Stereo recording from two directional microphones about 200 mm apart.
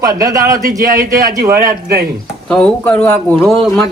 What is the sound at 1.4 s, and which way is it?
Speech, 45° right (ahead or behind).